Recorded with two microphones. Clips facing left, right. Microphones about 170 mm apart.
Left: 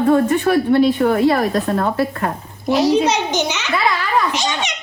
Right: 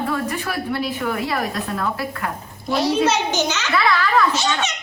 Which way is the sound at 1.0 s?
45° left (ahead or behind).